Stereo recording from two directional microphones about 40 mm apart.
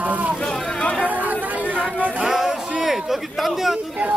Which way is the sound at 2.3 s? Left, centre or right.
Centre.